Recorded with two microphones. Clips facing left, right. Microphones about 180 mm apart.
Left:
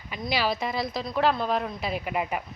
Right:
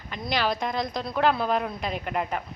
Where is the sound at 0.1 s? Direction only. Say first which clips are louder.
Even; 5° left (ahead or behind).